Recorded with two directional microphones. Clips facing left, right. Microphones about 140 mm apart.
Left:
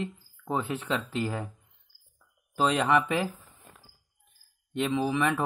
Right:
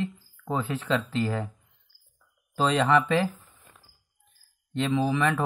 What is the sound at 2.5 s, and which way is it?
Speech, 15° left (ahead or behind).